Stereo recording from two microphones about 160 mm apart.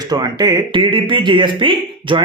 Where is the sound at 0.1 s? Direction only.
25° right (ahead or behind).